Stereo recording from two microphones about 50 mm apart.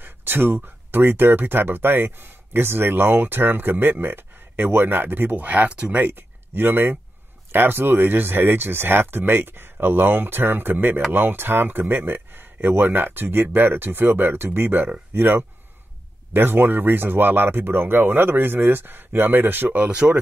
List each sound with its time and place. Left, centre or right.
0.0 s a sound: right
0.9 s speech: right
5.7 s speech: right
5.9 s speech: right
19.8 s speech: right